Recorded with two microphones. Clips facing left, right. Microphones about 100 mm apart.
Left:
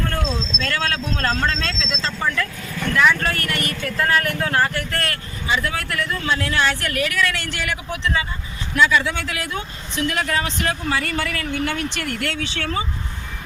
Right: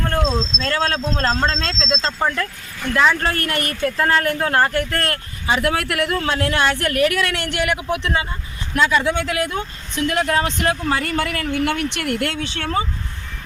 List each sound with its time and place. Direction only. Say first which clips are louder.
0.1 s speech: right 5 dB; 35° right (ahead or behind)
3.9 s speech: right 1 dB; 30° right (ahead or behind); by 8.3 s 55° right (ahead or behind)
8.7 s speech: even; 35° right (ahead or behind)
9.0 s speech: right 6 dB; 50° right (ahead or behind)